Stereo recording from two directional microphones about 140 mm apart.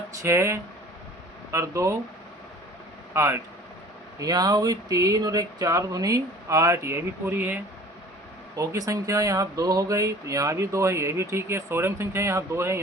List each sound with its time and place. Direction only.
0.1 s speech: 20° right (ahead or behind)
3.1 s speech: 20° right (ahead or behind)